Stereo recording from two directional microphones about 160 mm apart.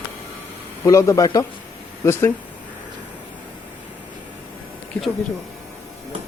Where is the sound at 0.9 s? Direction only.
20° left (ahead or behind).